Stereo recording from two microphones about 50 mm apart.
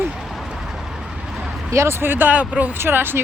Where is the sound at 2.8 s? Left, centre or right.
Right.